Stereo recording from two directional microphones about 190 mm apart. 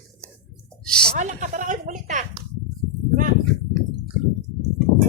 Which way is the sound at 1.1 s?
40° right (ahead or behind).